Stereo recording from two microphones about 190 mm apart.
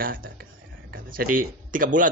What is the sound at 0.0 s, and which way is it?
A man's voice, 50° right (ahead or behind).